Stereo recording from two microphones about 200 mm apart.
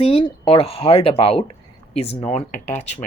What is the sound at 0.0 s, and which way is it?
Speech, 30° left (ahead or behind).